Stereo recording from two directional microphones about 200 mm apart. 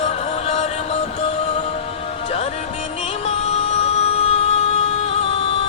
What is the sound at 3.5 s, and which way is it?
Music, 30° left (ahead or behind).